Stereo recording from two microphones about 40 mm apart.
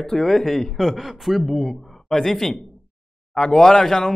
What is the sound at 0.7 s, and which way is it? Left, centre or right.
A man's voice, centre.